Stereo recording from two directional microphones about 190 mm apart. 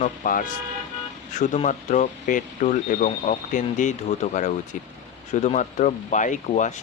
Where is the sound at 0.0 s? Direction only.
45° left (ahead or behind).